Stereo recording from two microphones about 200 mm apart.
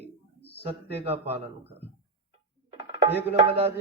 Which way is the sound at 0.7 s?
30° right (ahead or behind).